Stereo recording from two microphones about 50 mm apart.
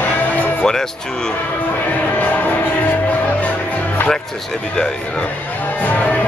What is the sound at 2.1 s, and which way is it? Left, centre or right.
Music, left.